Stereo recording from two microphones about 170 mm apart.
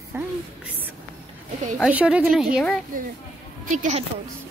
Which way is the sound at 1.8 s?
5° right (ahead or behind).